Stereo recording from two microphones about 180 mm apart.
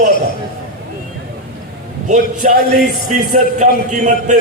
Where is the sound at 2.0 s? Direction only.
45° right (ahead or behind).